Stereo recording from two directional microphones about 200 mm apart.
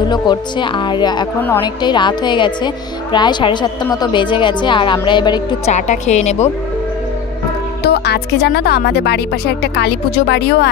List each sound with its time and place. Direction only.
0.1 s speech: 20° left (ahead or behind)
5.7 s speech: 35° left (ahead or behind)
7.8 s speech: 55° left (ahead or behind)